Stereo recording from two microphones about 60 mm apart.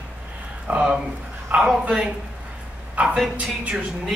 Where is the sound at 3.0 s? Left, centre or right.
Right.